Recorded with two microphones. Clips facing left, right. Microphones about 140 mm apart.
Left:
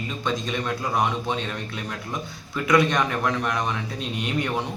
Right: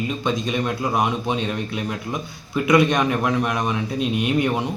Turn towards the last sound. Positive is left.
turn(degrees=-10)  # may be behind; listen again after turning